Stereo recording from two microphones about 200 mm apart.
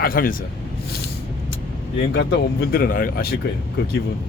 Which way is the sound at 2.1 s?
60° left (ahead or behind).